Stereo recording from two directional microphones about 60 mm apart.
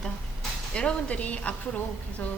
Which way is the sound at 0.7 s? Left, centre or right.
Centre.